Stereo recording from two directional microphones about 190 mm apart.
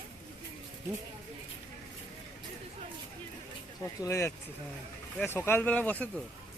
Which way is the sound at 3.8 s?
15° left (ahead or behind).